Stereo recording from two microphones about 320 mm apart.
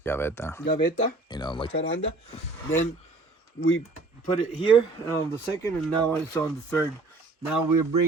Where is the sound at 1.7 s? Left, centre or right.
Left.